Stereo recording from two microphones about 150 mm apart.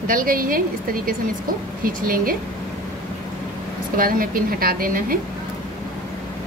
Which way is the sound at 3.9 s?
70° right (ahead or behind).